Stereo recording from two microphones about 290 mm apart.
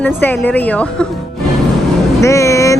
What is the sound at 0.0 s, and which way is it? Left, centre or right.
A woman's voice, centre.